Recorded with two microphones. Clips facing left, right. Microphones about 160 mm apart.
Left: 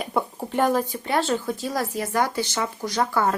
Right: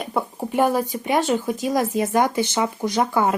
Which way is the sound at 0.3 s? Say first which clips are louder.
Right 3 dB; 10° right (ahead or behind).